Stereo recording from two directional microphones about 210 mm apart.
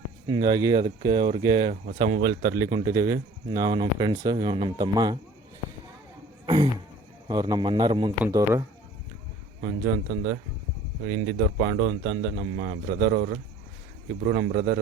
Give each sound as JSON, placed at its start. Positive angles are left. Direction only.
{"t": 0.3, "sound": "speech", "side_deg": -20}
{"t": 1.7, "sound": "speech", "side_deg": -35}
{"t": 2.7, "sound": "speech", "side_deg": -15}
{"t": 6.4, "sound": "throat clearing", "side_deg": -20}
{"t": 7.3, "sound": "speech", "side_deg": -20}
{"t": 9.6, "sound": "speech", "side_deg": -40}
{"t": 11.5, "sound": "speech", "side_deg": -50}